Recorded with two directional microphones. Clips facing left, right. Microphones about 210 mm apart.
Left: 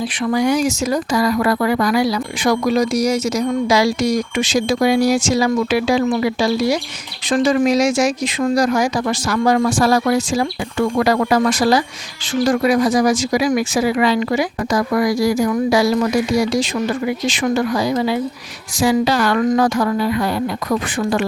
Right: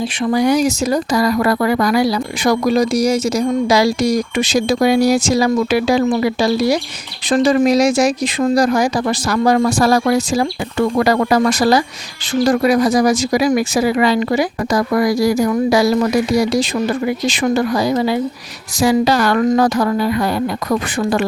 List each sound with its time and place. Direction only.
0.3 s speech: 35° right (ahead or behind)